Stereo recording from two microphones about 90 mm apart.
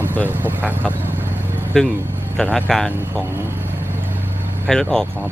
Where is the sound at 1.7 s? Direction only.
10° left (ahead or behind).